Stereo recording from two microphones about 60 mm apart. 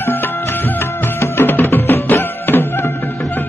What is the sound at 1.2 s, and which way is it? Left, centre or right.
Music, left.